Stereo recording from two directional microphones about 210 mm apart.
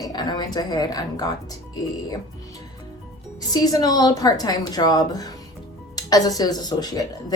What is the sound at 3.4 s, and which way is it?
A woman's voice, 20° left (ahead or behind).